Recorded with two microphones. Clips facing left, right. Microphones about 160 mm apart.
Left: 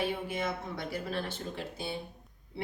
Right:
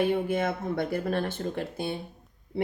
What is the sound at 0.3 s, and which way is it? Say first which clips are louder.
A woman's voice: right 7 dB; 55° right (ahead or behind).